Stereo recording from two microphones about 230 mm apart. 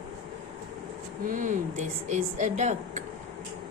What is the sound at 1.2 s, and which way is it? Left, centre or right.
Speech, right.